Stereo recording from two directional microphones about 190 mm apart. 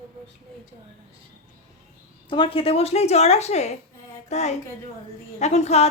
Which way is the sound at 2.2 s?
25° left (ahead or behind).